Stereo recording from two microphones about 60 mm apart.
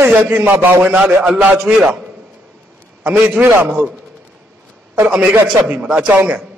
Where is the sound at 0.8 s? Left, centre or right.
Centre.